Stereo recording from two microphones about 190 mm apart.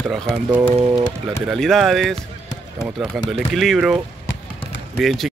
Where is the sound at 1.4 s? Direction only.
Centre (ahead or behind).